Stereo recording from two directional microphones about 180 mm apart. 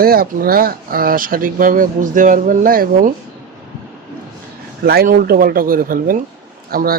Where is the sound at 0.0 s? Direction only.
55° right (ahead or behind).